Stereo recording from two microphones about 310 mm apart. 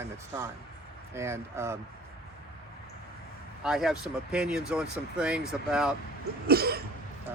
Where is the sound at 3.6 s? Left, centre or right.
Centre.